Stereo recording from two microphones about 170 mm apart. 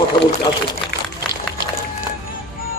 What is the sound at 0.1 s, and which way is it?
Speech, 25° left (ahead or behind).